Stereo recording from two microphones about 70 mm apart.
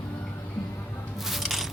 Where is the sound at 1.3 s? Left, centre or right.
Centre.